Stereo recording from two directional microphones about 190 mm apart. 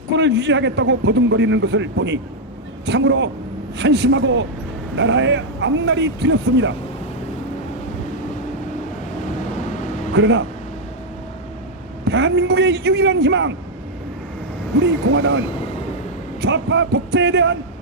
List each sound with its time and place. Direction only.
0.1 s a man's voice: 65° right (ahead or behind)
10.2 s a man's voice: 65° right (ahead or behind)
12.0 s a man's voice: 60° right (ahead or behind)
14.8 s speech: 90° right
16.4 s a man's voice: 70° right (ahead or behind)